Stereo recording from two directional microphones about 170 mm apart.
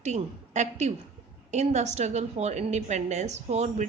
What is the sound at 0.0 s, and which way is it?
A woman's voice, 40° right (ahead or behind).